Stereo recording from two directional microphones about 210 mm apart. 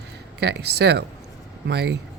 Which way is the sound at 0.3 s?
50° right (ahead or behind).